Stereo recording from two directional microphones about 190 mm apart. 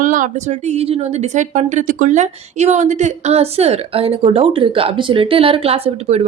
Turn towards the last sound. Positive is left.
turn(degrees=-30)  # may be behind; listen again after turning